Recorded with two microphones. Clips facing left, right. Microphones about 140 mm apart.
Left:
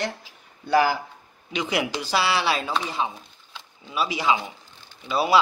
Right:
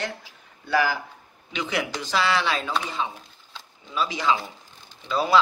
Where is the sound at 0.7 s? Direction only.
20° left (ahead or behind).